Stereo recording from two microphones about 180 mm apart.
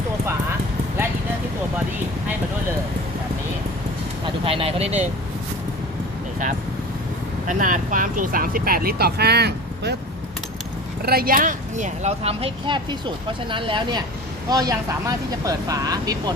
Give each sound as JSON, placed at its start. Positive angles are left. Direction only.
{"t": 4.4, "sound": "speech", "side_deg": -30}
{"t": 7.4, "sound": "speech", "side_deg": -45}
{"t": 11.0, "sound": "speech", "side_deg": -55}